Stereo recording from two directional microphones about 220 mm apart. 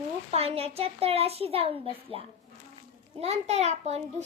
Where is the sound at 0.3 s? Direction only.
25° right (ahead or behind).